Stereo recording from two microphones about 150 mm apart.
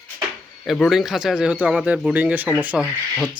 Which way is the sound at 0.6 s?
Centre (ahead or behind).